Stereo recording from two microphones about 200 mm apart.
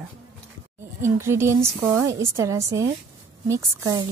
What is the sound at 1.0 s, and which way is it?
Speech, 15° right (ahead or behind).